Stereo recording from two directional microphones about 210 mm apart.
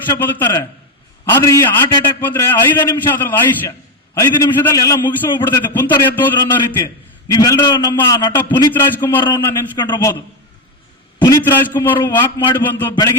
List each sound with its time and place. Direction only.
0.1 s a man's voice: 10° left (ahead or behind)
11.2 s a man's voice: 15° left (ahead or behind)